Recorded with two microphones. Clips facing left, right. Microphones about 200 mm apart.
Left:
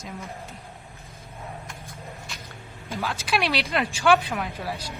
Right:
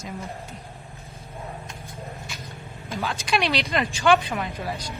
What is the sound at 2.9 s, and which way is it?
Speech, centre (ahead or behind).